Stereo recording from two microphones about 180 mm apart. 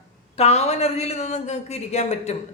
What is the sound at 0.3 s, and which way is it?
A man's voice, 35° left (ahead or behind).